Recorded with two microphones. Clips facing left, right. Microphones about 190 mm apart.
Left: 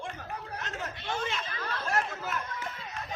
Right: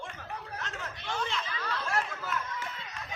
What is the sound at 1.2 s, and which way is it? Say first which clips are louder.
Snicker: even; 50° left (ahead or behind).